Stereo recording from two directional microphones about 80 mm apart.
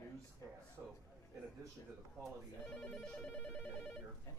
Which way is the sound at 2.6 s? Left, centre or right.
Centre.